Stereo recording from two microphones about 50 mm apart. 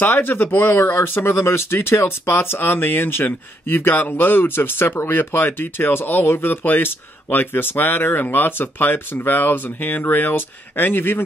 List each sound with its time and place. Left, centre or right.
0.1 s speech: left